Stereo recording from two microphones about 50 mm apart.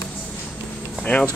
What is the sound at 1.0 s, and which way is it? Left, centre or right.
Speech, left.